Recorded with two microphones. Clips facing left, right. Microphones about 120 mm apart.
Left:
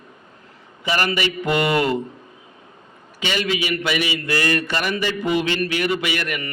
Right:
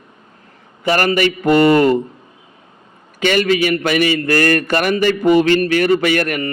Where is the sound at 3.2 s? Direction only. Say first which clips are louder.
Right 9 dB; 50° right (ahead or behind).